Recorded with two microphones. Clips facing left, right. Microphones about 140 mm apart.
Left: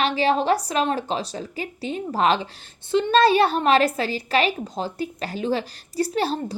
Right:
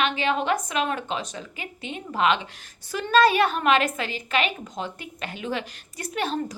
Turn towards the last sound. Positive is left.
turn(degrees=35)  # may be behind; listen again after turning